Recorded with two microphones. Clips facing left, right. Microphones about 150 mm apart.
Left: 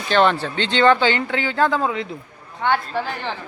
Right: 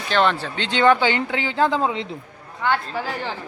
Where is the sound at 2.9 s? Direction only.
5° right (ahead or behind).